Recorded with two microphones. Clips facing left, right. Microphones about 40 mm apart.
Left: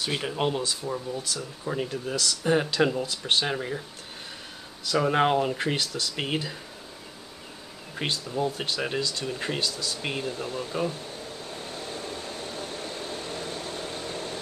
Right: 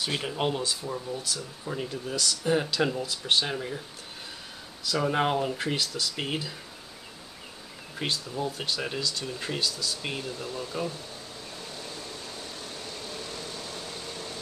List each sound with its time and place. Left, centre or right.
0.0 s speech: centre
4.8 s speech: centre
7.9 s speech: centre
11.6 s a sound: left